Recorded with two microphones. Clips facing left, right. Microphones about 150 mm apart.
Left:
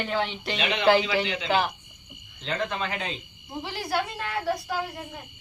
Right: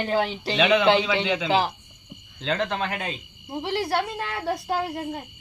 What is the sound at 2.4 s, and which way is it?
Speech, 75° right (ahead or behind).